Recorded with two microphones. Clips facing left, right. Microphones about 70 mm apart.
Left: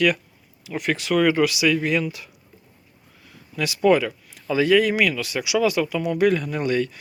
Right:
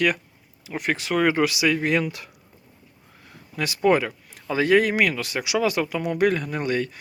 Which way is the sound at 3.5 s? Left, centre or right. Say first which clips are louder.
Left 2 dB; right.